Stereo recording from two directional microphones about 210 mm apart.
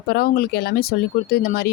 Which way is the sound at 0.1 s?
45° left (ahead or behind).